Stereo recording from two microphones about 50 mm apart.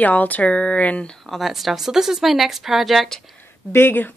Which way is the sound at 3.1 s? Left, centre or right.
Centre.